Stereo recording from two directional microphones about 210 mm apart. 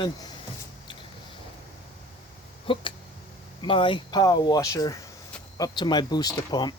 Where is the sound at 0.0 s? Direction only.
20° left (ahead or behind).